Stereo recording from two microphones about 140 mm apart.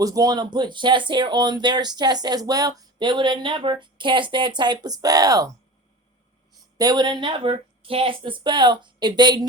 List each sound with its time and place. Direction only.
0.0 s speech: 25° right (ahead or behind)
6.7 s speech: 30° right (ahead or behind)